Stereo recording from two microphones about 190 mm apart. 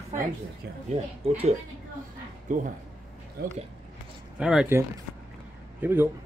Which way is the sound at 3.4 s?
55° right (ahead or behind).